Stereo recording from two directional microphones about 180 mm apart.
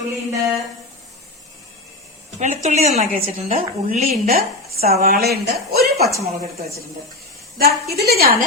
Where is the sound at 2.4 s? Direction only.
40° right (ahead or behind).